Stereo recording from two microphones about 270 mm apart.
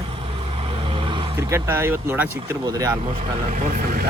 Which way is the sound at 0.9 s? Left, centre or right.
Centre.